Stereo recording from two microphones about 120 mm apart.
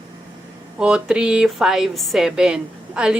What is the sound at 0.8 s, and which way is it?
Speech, 5° right (ahead or behind).